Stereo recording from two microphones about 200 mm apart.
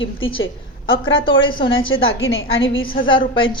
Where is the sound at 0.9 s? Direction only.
75° left (ahead or behind).